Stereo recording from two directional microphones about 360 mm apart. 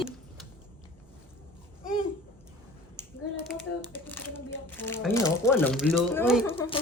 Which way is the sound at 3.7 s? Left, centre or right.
Left.